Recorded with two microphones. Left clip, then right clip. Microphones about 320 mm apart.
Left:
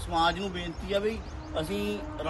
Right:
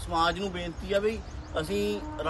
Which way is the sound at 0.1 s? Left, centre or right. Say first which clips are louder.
Even; centre.